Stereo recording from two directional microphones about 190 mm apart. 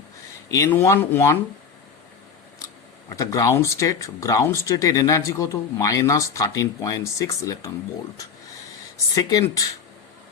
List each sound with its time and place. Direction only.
0.4 s speech: 15° left (ahead or behind)
3.1 s speech: 15° left (ahead or behind)
9.1 s speech: 15° left (ahead or behind)